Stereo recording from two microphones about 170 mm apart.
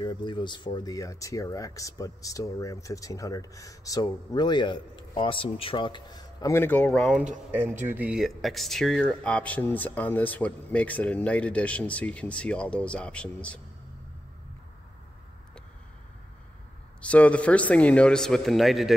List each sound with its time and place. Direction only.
0.0 s speech: 25° left (ahead or behind); by 7.2 s 5° left (ahead or behind)
7.8 s speech: 10° right (ahead or behind); by 13.6 s 5° left (ahead or behind)
17.0 s speech: 5° left (ahead or behind)